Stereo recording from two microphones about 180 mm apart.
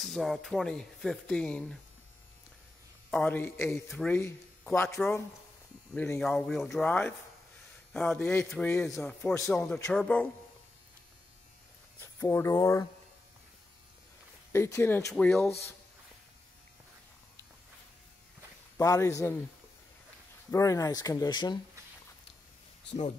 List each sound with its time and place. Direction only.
0.0 s speech: centre (ahead or behind)
3.1 s a man's voice: 5° left (ahead or behind)
12.0 s speech: 15° left (ahead or behind)
14.5 s a man's voice: 15° left (ahead or behind)
18.8 s a man's voice: 15° left (ahead or behind)
20.5 s speech: 15° left (ahead or behind)